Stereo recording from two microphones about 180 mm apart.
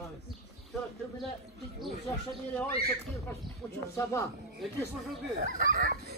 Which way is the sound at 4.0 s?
15° left (ahead or behind).